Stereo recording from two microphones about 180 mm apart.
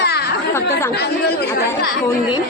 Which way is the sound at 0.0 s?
65° left (ahead or behind).